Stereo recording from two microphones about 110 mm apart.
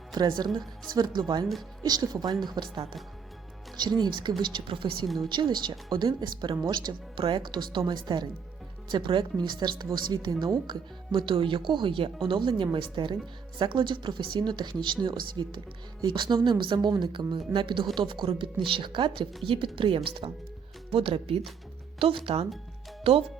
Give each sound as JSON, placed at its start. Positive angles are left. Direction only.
{"t": 0.1, "sound": "a woman's voice", "side_deg": -40}
{"t": 5.0, "sound": "a woman's voice", "side_deg": 0}
{"t": 5.3, "sound": "a woman's voice", "side_deg": -45}
{"t": 20.9, "sound": "speech", "side_deg": -60}